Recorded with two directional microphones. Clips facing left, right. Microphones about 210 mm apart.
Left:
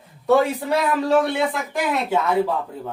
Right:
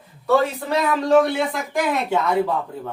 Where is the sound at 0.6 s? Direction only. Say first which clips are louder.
Even; 5° left (ahead or behind).